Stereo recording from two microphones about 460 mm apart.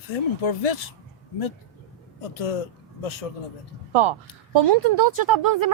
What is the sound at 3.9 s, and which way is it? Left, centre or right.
Speech, right.